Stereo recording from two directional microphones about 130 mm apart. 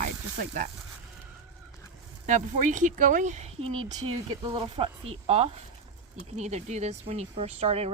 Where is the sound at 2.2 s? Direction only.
75° right (ahead or behind).